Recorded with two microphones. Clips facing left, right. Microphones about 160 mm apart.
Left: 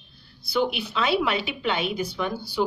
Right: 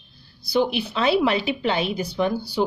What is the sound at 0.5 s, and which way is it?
Speech, 40° right (ahead or behind).